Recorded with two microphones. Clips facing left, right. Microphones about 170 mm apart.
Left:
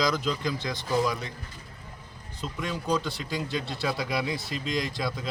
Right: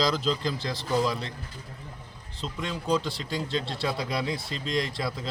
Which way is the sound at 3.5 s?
30° right (ahead or behind).